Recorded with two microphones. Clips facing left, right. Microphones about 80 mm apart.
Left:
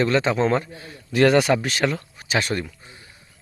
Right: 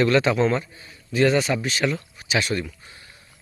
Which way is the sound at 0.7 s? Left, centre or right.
Left.